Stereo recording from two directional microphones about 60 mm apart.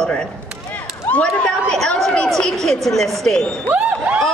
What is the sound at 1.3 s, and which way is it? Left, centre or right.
A woman's voice, centre.